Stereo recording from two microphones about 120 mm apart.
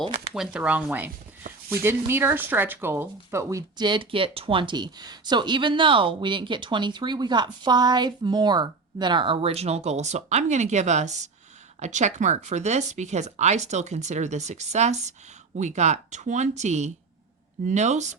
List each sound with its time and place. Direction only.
0.0 s speech: 50° right (ahead or behind)
0.3 s speech: 10° right (ahead or behind)
3.8 s speech: 40° right (ahead or behind); by 18.2 s 75° right (ahead or behind)